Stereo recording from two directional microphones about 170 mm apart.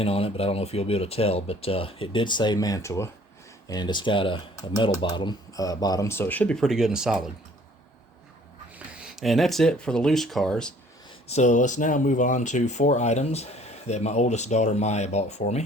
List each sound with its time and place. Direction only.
0.0 s speech: 35° left (ahead or behind); by 7.3 s centre (ahead or behind)
9.0 s speech: 5° right (ahead or behind)
11.3 s speech: 45° left (ahead or behind)